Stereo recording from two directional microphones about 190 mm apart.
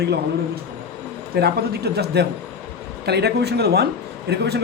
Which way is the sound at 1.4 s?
60° right (ahead or behind).